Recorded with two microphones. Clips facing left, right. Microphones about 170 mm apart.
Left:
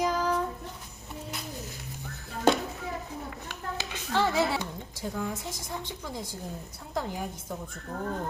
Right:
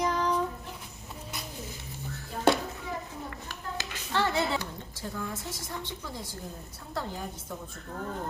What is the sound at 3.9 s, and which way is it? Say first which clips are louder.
A woman's voice: left 2 dB; 10° left (ahead or behind).